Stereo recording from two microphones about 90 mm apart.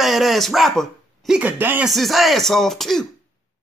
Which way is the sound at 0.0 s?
Centre (ahead or behind).